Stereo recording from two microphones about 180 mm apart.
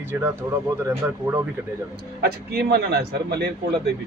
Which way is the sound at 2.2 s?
60° right (ahead or behind).